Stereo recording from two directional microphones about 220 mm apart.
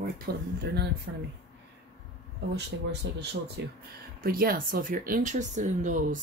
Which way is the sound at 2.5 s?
50° right (ahead or behind).